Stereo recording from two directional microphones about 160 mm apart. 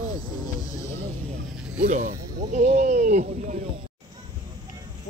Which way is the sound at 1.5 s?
5° right (ahead or behind).